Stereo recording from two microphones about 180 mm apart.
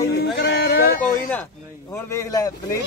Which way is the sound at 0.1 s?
65° left (ahead or behind).